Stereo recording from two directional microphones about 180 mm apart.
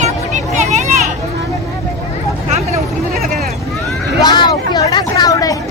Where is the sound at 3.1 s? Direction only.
Centre (ahead or behind).